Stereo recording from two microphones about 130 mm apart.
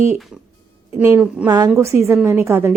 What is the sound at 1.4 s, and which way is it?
Speech, 25° right (ahead or behind).